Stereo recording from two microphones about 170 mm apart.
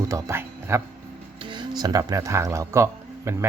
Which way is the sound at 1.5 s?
25° right (ahead or behind).